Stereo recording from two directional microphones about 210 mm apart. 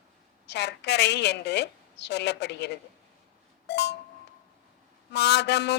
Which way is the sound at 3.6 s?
55° left (ahead or behind).